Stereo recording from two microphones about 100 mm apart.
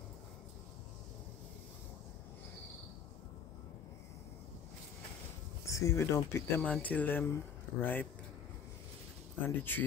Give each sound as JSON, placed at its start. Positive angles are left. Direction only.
{"t": 5.7, "sound": "speech", "side_deg": 30}
{"t": 6.6, "sound": "speech", "side_deg": 15}
{"t": 9.4, "sound": "speech", "side_deg": 20}